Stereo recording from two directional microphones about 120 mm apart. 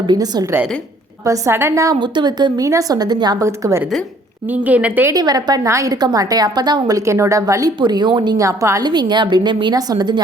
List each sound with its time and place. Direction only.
0.1 s a woman's voice: 35° right (ahead or behind)
1.2 s a woman's voice: 25° right (ahead or behind)
2.0 s a woman's voice: 40° right (ahead or behind)
3.4 s a woman's voice: 25° right (ahead or behind)
4.4 s a woman's voice: 15° right (ahead or behind)
5.1 s a woman's voice: 35° right (ahead or behind)
8.4 s a woman's voice: 25° right (ahead or behind)
8.8 s a woman's voice: 40° right (ahead or behind)